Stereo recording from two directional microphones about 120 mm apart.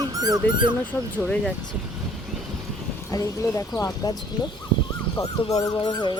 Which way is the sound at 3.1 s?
30° left (ahead or behind).